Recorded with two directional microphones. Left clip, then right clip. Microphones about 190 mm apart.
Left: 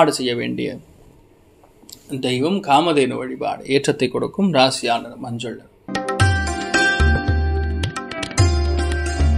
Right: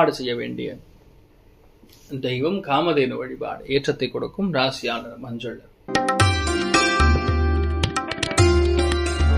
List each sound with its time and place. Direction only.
0.0 s speech: 45° left (ahead or behind)
2.0 s speech: 45° left (ahead or behind)
5.9 s music: centre (ahead or behind)